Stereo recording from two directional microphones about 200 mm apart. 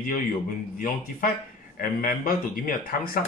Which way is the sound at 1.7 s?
45° left (ahead or behind).